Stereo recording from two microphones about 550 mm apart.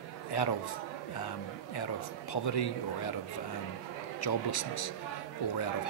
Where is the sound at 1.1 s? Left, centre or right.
Left.